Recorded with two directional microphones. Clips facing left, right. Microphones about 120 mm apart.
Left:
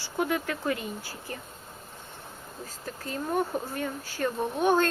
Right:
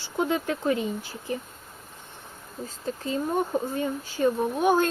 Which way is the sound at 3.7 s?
15° right (ahead or behind).